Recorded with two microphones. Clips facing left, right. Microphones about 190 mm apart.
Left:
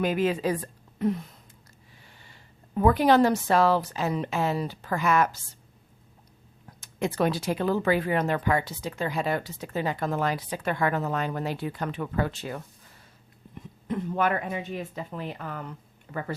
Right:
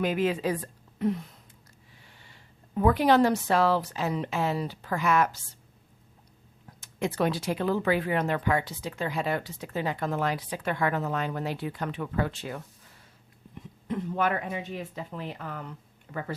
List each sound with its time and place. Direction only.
0.0 s a woman's voice: 40° left (ahead or behind)
2.7 s a woman's voice: 45° left (ahead or behind)
6.7 s speech: 45° left (ahead or behind)
13.8 s a woman's voice: 50° left (ahead or behind)